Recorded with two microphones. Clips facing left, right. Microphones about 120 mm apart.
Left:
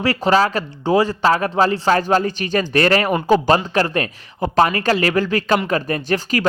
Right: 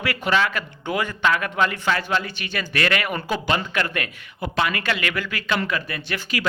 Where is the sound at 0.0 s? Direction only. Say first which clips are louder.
Left 6 dB; 35° left (ahead or behind).